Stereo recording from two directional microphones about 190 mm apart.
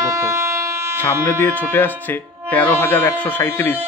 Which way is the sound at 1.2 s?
10° left (ahead or behind).